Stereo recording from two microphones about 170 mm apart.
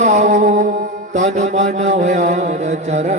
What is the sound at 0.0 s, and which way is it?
Music, 45° right (ahead or behind).